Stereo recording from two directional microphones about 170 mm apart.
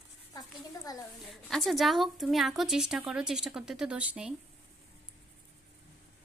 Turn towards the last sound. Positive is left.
turn(degrees=-5)  # may be behind; listen again after turning